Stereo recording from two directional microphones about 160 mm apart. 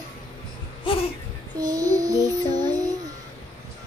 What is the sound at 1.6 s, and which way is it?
Child singing, 20° right (ahead or behind).